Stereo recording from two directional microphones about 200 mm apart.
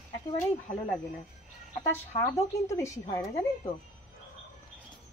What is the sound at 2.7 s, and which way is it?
Speech, 15° left (ahead or behind).